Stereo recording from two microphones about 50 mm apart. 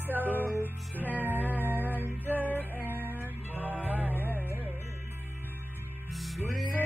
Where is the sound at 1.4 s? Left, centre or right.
Right.